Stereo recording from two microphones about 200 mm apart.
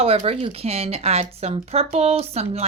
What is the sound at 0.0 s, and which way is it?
Speech, 30° right (ahead or behind).